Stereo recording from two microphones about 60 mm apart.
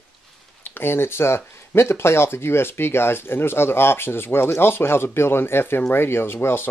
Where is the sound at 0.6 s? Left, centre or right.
Left.